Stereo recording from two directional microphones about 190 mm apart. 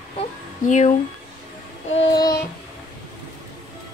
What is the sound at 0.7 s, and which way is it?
Speech, 40° left (ahead or behind).